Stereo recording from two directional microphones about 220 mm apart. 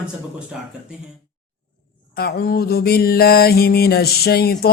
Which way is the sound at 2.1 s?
45° left (ahead or behind).